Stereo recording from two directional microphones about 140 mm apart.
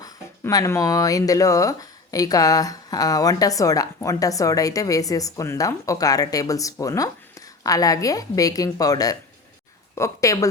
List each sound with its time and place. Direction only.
0.0 s speech: 25° left (ahead or behind)